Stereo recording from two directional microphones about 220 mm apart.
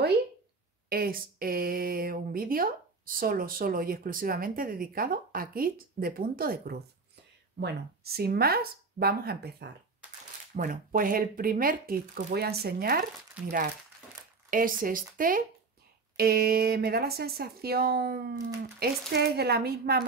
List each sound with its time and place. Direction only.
0.8 s speech: 40° right (ahead or behind)
13.4 s speech: 5° right (ahead or behind)
14.5 s speech: 40° right (ahead or behind)